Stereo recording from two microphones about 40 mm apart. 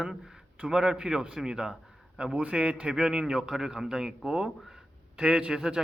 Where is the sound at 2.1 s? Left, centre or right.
Right.